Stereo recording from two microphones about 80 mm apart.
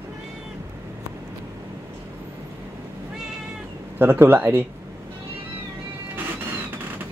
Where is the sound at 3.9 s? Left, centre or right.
Right.